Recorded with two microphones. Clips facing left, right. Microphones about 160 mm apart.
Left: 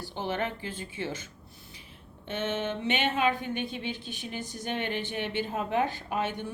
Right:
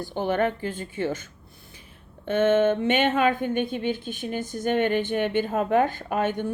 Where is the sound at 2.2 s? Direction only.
50° right (ahead or behind).